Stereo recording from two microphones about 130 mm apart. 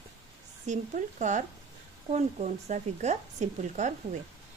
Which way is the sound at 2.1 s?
60° right (ahead or behind).